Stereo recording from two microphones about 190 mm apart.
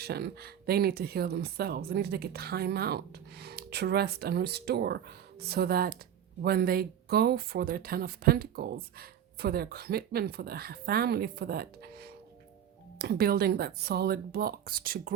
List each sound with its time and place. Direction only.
0.0 s speech: 55° right (ahead or behind)